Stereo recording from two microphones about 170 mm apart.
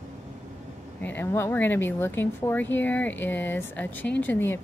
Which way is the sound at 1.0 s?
15° left (ahead or behind).